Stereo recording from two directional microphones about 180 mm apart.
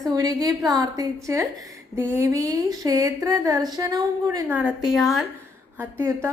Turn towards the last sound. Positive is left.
turn(degrees=-10)  # may be behind; listen again after turning